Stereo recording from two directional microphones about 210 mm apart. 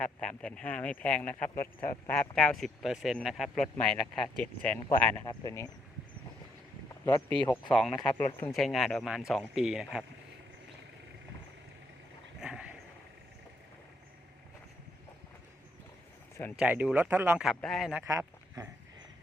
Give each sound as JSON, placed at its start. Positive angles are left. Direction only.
{"t": 0.0, "sound": "speech", "side_deg": 5}
{"t": 5.2, "sound": "speech", "side_deg": 20}
{"t": 7.4, "sound": "speech", "side_deg": 20}
{"t": 7.7, "sound": "speech", "side_deg": 0}
{"t": 12.4, "sound": "vehicle", "side_deg": -5}
{"t": 16.6, "sound": "speech", "side_deg": -5}
{"t": 18.0, "sound": "speech", "side_deg": -15}